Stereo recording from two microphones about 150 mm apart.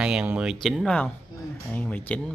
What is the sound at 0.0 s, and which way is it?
Speech, 5° right (ahead or behind).